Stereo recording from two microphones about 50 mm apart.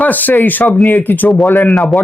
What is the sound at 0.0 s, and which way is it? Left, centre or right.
A man's voice, left.